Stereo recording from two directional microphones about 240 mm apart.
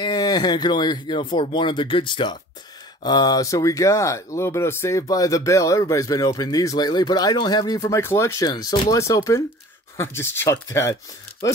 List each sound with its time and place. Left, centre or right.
0.0 s speech: centre